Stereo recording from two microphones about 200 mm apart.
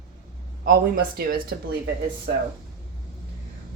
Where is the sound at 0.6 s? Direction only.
45° right (ahead or behind).